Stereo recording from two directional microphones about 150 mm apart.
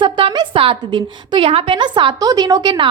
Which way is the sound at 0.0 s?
35° right (ahead or behind).